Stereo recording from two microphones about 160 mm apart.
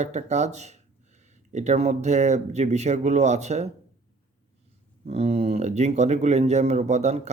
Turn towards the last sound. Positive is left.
turn(degrees=-45)  # may be behind; listen again after turning